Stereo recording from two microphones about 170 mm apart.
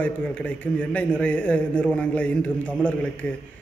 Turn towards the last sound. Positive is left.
turn(degrees=5)  # may be behind; listen again after turning